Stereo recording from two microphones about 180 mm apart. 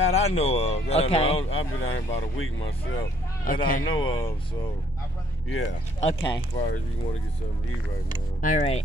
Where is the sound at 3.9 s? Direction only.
30° left (ahead or behind).